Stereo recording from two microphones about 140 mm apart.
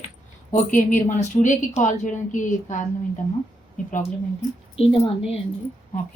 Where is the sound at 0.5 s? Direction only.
65° left (ahead or behind).